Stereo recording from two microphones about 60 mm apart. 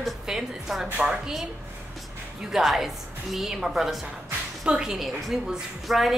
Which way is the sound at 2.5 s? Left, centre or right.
Centre.